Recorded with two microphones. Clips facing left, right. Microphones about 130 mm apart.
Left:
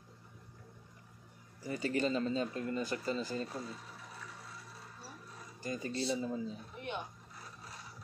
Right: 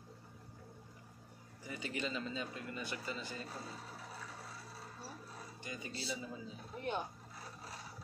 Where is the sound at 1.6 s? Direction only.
40° left (ahead or behind).